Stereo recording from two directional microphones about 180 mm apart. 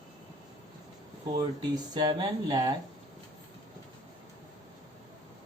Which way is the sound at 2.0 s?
25° right (ahead or behind).